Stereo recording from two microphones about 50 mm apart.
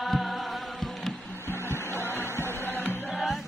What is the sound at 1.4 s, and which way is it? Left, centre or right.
Music, left.